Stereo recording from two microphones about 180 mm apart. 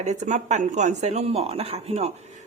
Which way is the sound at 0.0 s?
40° right (ahead or behind).